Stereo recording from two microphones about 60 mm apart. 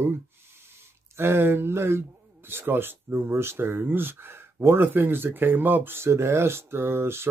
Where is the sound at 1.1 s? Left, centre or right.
Right.